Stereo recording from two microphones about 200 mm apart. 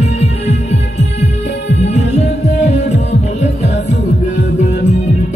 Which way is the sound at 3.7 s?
60° left (ahead or behind).